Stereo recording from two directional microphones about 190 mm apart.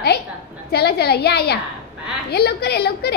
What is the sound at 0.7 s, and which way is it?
A woman's voice, 55° left (ahead or behind).